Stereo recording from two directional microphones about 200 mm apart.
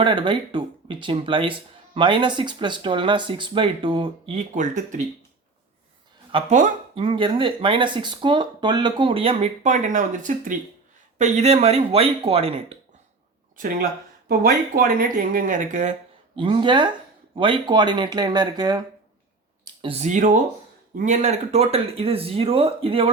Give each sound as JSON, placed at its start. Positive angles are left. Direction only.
{"t": 0.0, "sound": "speech", "side_deg": -25}
{"t": 6.3, "sound": "speech", "side_deg": -35}
{"t": 14.3, "sound": "speech", "side_deg": -45}
{"t": 19.8, "sound": "speech", "side_deg": -30}